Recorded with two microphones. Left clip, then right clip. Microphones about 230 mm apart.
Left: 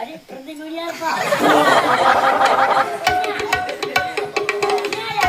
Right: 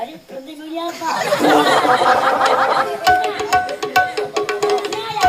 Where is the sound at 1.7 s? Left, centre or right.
Centre.